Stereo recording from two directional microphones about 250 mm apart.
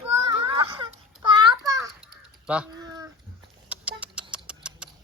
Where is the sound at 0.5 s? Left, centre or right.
Centre.